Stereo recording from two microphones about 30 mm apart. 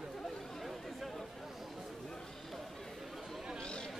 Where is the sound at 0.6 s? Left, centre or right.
Centre.